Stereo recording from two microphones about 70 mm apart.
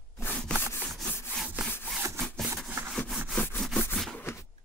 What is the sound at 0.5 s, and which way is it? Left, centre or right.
Rub, left.